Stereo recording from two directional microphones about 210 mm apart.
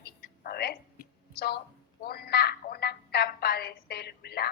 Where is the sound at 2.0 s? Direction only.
50° left (ahead or behind).